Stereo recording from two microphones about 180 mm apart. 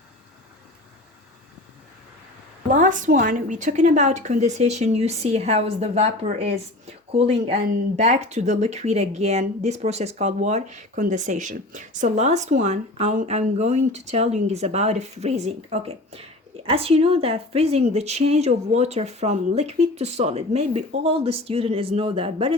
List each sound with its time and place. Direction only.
2.6 s speech: 45° right (ahead or behind)